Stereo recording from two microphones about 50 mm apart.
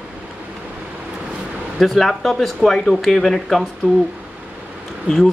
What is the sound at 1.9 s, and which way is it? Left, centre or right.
Speech, centre.